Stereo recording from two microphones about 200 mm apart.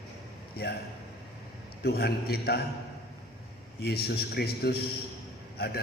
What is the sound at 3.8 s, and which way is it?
A man's voice, 50° left (ahead or behind).